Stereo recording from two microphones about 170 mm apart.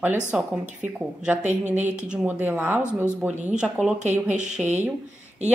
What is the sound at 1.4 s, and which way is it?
Speech, 45° right (ahead or behind).